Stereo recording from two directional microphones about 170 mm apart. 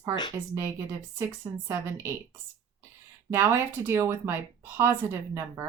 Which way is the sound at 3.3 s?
15° right (ahead or behind).